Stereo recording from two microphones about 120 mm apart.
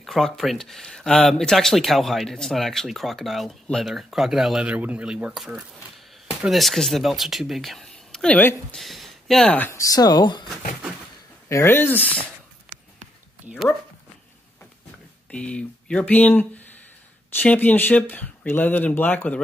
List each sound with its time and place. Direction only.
0.0 s speech: centre (ahead or behind)
8.7 s speech: centre (ahead or behind)
9.8 s speech: 30° left (ahead or behind)
11.4 s speech: 20° left (ahead or behind)
13.5 s speech: centre (ahead or behind)
15.3 s speech: 10° left (ahead or behind)